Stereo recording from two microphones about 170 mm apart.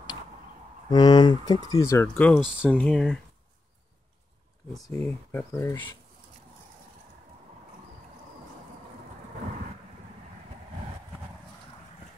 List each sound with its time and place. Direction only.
0.8 s speech: 25° left (ahead or behind); by 3.2 s 5° left (ahead or behind)
4.7 s speech: centre (ahead or behind)
5.3 s speech: 15° left (ahead or behind)